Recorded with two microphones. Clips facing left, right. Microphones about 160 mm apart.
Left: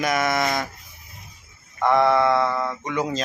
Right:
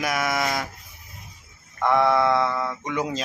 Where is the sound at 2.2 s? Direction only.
10° left (ahead or behind).